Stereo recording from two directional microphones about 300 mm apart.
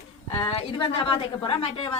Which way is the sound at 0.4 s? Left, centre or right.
Centre.